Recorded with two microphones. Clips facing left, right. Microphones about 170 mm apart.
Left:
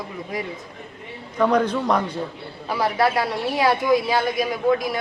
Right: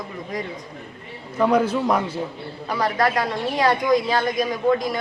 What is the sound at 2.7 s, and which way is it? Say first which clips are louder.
A woman's voice: left 1 dB; 10° left (ahead or behind).